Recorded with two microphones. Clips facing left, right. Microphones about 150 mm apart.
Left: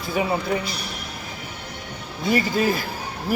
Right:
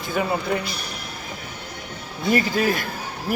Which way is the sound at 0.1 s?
5° left (ahead or behind).